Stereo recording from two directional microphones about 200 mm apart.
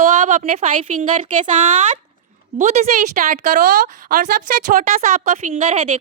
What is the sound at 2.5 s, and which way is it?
A woman's voice, 40° right (ahead or behind).